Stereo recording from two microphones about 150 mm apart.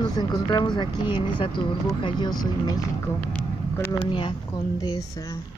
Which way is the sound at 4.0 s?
35° left (ahead or behind).